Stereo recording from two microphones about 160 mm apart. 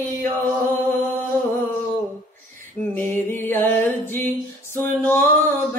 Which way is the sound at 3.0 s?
15° left (ahead or behind).